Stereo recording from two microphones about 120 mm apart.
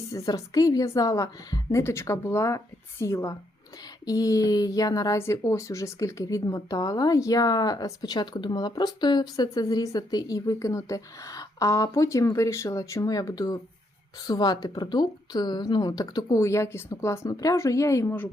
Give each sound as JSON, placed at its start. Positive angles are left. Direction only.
{"t": 0.1, "sound": "a woman's voice", "side_deg": 30}